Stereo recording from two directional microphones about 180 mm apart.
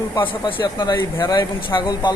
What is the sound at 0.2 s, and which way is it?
Speech, 25° left (ahead or behind).